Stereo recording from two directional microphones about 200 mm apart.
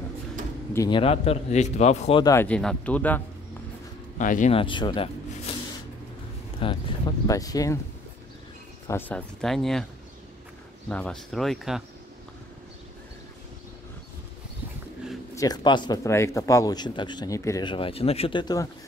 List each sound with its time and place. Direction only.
0.7 s a man's voice: 25° left (ahead or behind)
2.2 s speech: 10° left (ahead or behind)
4.2 s speech: 40° left (ahead or behind)
4.6 s speech: 25° left (ahead or behind)
6.6 s speech: 25° left (ahead or behind)
8.8 s speech: 10° left (ahead or behind)
10.9 s speech: 5° left (ahead or behind)
15.3 s a man's voice: 20° left (ahead or behind)